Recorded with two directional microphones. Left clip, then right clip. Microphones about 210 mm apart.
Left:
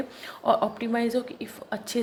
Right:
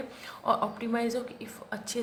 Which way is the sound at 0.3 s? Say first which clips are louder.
Left 5 dB; 25° left (ahead or behind).